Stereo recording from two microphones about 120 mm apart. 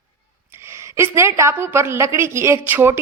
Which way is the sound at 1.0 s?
20° right (ahead or behind).